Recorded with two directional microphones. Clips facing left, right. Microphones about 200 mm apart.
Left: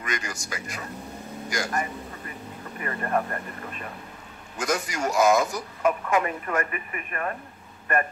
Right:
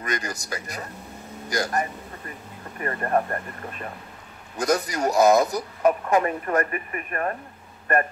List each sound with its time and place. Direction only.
0.0 s speech: 35° right (ahead or behind)
4.6 s speech: 35° right (ahead or behind)